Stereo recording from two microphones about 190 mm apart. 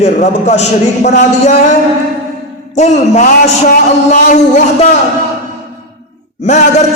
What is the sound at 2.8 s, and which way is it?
A man's voice, 35° left (ahead or behind).